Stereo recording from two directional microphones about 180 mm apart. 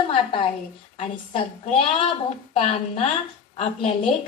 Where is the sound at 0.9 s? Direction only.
35° left (ahead or behind).